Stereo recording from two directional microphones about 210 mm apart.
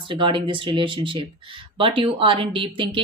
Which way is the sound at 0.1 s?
25° right (ahead or behind).